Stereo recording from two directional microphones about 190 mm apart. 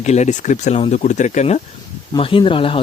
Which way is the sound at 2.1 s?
25° left (ahead or behind).